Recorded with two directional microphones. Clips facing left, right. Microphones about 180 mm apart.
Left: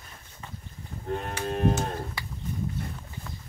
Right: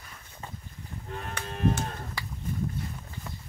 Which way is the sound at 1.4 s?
50° left (ahead or behind).